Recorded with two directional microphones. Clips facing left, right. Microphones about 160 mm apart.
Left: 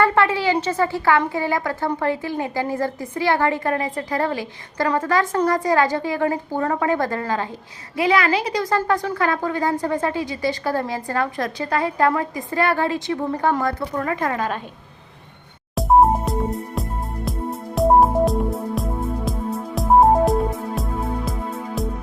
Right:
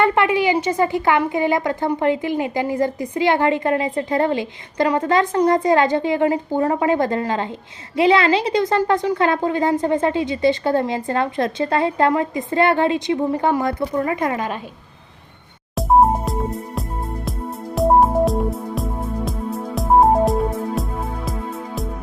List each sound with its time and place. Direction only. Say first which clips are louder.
0.0 s a woman's voice: right 1 dB; 20° right (ahead or behind)
15.7 s music: even; centre (ahead or behind)